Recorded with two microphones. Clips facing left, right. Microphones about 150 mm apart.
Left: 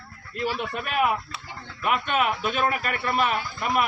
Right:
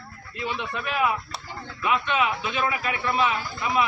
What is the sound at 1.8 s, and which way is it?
Speech, 50° left (ahead or behind).